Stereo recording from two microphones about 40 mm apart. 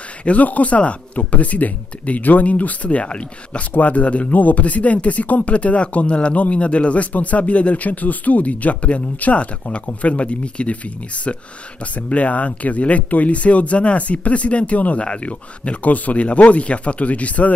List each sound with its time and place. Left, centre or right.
0.2 s speech: left